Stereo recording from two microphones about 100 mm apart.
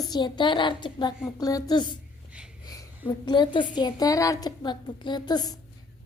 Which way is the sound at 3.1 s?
50° left (ahead or behind).